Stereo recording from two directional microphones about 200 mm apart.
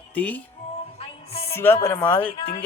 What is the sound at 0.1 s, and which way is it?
Music, 10° left (ahead or behind).